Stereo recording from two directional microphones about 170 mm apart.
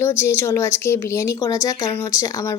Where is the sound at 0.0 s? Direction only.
15° left (ahead or behind).